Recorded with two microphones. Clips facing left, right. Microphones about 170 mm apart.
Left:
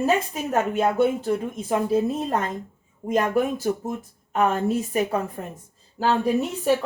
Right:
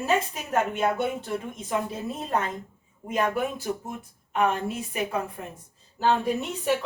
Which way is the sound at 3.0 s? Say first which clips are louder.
Left 5 dB; 40° left (ahead or behind).